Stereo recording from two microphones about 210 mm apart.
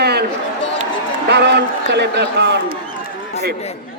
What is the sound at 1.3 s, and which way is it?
A man's voice, 55° right (ahead or behind).